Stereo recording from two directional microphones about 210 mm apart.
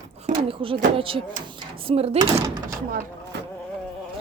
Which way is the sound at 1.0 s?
25° right (ahead or behind).